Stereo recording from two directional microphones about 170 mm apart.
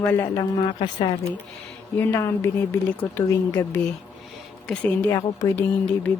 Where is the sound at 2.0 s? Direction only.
15° left (ahead or behind).